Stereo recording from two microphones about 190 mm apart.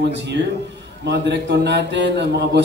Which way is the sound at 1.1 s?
65° right (ahead or behind).